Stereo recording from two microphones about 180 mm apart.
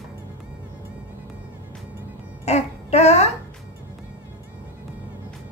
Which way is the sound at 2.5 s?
35° left (ahead or behind).